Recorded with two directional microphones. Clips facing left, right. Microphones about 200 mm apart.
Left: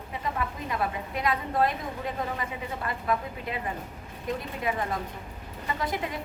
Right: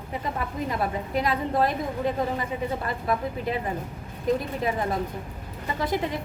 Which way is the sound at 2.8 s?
35° right (ahead or behind).